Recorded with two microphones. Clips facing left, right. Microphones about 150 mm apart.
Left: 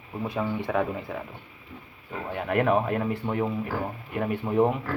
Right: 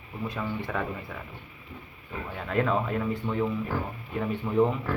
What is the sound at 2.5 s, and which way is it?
Speech, 65° left (ahead or behind).